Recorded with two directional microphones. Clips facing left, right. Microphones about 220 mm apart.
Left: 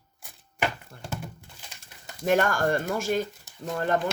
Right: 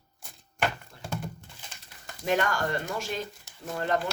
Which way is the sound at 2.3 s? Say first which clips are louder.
Left 4 dB; 50° left (ahead or behind).